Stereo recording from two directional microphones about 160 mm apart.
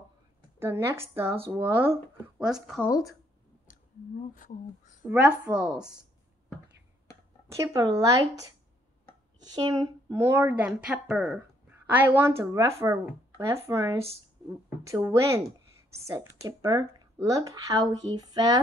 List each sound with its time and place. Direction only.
0.6 s a woman's voice: 15° right (ahead or behind)
2.9 s speech: 20° left (ahead or behind)
4.4 s speech: 50° left (ahead or behind)
5.0 s a woman's voice: 10° right (ahead or behind)
7.4 s a woman's voice: 20° right (ahead or behind)